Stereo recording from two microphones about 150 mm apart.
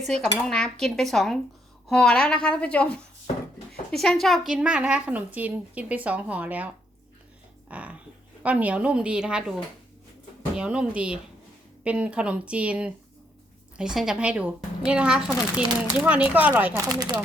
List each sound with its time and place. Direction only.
0.4 s a woman's voice: 5° left (ahead or behind); by 16.8 s 10° right (ahead or behind)